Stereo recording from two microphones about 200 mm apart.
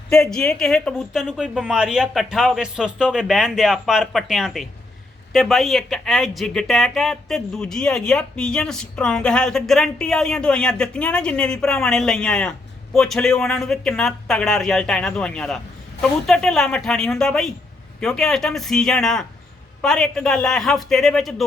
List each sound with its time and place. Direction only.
0.1 s speech: 5° left (ahead or behind)